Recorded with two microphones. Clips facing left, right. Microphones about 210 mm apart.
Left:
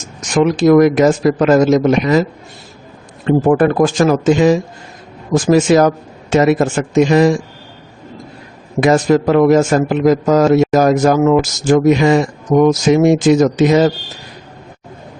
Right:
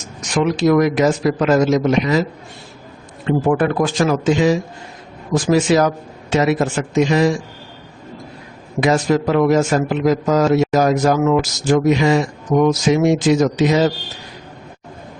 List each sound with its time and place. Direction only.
0.5 s a man's voice: 50° left (ahead or behind)
3.2 s a man's voice: 45° left (ahead or behind)
8.8 s a man's voice: 50° left (ahead or behind)